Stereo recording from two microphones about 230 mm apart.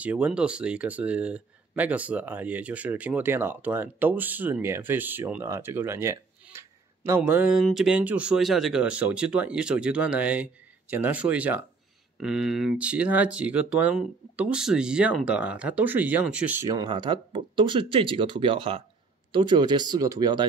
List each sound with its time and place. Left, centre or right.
0.0 s speech: centre